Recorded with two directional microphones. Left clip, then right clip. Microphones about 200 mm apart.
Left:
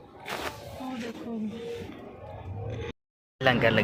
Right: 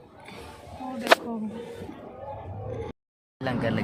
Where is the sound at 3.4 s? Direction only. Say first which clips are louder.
Left 7 dB; 15° left (ahead or behind).